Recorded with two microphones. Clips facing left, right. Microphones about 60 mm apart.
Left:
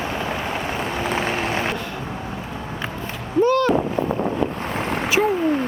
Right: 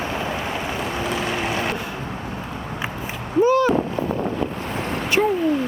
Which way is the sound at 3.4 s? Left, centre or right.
Centre.